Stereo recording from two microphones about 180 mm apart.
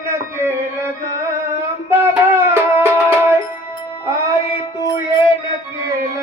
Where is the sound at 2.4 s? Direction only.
15° right (ahead or behind).